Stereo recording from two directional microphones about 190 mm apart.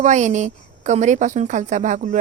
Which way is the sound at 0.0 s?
40° right (ahead or behind).